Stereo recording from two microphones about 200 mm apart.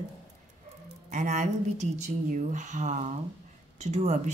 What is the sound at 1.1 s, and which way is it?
A woman's voice, 35° right (ahead or behind).